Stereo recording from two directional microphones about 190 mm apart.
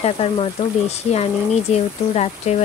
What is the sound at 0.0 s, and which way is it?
Speech, 30° left (ahead or behind).